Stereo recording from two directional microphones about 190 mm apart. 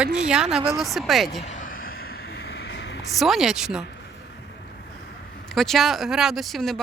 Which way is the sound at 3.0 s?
Centre (ahead or behind).